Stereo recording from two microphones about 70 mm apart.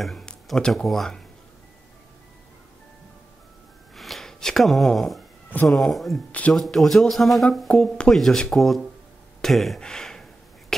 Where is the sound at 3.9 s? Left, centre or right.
Centre.